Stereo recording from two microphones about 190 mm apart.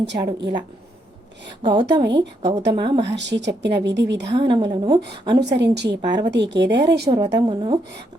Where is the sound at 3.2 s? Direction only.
65° right (ahead or behind).